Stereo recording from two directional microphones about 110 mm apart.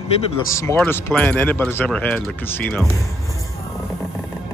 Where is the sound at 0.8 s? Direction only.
20° left (ahead or behind).